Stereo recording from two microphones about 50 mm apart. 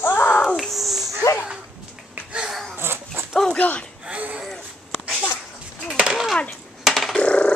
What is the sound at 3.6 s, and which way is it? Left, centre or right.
Speech, left.